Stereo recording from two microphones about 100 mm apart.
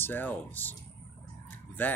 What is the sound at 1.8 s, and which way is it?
Speech, 15° left (ahead or behind).